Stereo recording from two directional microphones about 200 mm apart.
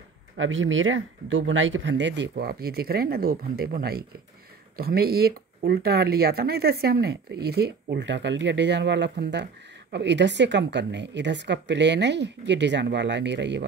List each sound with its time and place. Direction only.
0.4 s speech: 75° right (ahead or behind)